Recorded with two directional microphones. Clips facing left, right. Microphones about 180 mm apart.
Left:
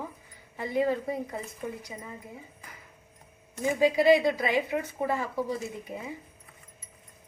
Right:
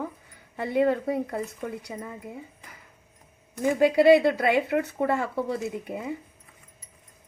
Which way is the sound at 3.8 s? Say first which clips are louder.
Right 4 dB; 65° right (ahead or behind).